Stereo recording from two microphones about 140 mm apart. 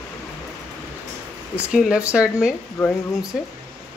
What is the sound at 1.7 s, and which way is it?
Speech, 5° right (ahead or behind).